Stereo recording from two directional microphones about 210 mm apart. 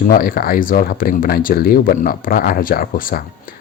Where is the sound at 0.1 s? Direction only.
45° left (ahead or behind).